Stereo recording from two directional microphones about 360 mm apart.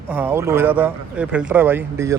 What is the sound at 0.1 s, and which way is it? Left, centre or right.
Speech, centre.